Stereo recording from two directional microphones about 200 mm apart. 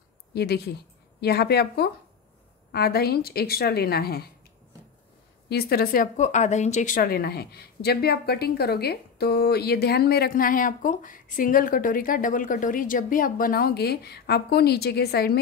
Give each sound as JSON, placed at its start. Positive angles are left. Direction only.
{"t": 0.3, "sound": "speech", "side_deg": 55}
{"t": 5.5, "sound": "speech", "side_deg": 50}